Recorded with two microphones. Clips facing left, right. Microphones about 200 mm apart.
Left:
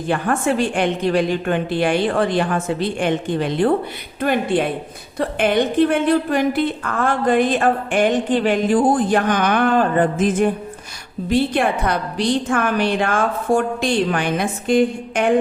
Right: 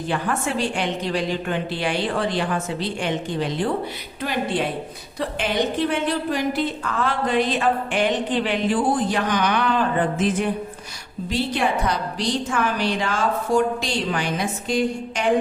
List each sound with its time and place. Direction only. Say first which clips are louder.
0.1 s a woman's voice: left 6 dB; 50° left (ahead or behind)